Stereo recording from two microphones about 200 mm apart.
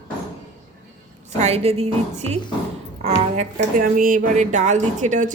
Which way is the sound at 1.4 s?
30° right (ahead or behind).